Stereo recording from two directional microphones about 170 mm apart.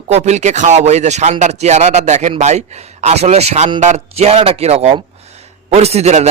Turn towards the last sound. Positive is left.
turn(degrees=-40)  # may be behind; listen again after turning